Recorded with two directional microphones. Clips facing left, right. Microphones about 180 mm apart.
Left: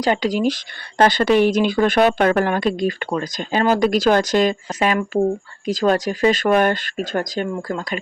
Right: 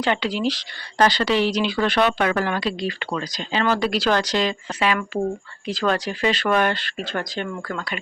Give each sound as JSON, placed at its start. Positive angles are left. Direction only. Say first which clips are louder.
{"t": 0.0, "sound": "speech", "louder": "left 4 dB", "side_deg": 40}
{"t": 7.4, "sound": "speech", "louder": "left 5 dB", "side_deg": 30}